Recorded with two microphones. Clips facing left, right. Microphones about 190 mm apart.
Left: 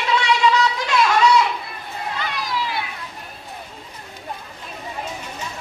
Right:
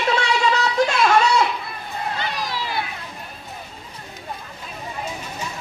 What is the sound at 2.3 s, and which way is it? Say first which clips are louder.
Children playing: left 1 dB; 40° right (ahead or behind).